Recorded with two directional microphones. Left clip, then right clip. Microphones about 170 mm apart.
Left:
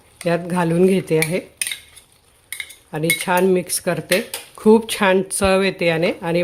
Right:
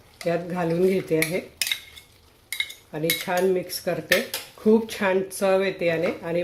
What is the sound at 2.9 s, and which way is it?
Speech, 40° left (ahead or behind).